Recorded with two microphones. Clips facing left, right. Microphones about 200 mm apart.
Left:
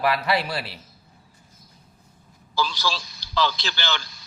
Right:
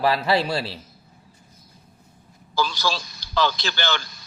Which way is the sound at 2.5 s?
50° right (ahead or behind).